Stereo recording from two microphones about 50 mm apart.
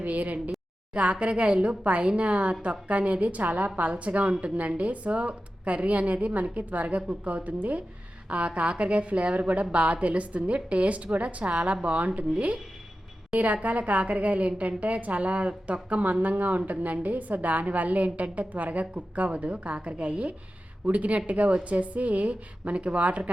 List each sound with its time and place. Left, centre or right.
0.0 s a woman's voice: right
1.1 s a woman's voice: right
13.4 s a woman's voice: right